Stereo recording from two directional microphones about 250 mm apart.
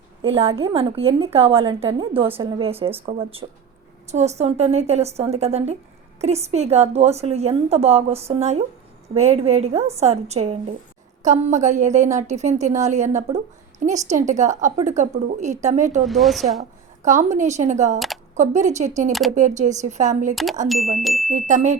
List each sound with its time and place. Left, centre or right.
0.2 s a woman's voice: right
16.0 s speech: centre
17.0 s a woman's voice: right
20.3 s speech: centre
21.2 s a woman's voice: right